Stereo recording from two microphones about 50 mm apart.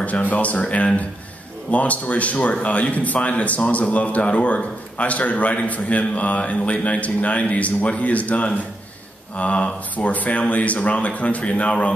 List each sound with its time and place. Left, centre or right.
0.0 s a man's voice: left